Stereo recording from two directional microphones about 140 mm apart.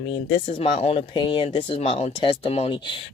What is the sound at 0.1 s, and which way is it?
Speech, 45° left (ahead or behind).